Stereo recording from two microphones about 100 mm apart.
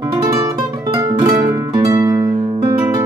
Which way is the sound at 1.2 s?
35° right (ahead or behind).